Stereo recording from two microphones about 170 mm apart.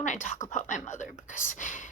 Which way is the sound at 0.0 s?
45° left (ahead or behind).